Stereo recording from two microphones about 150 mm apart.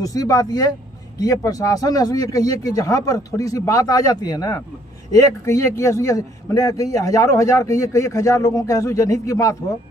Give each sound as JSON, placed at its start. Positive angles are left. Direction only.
{"t": 0.0, "sound": "speech", "side_deg": 25}